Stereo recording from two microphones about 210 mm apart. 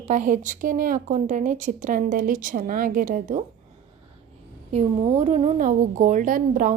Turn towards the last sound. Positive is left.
turn(degrees=-40)  # may be behind; listen again after turning